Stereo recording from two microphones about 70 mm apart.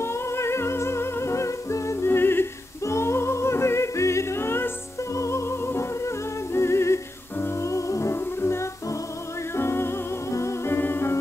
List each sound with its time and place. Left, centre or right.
0.0 s music: left
2.0 s music: left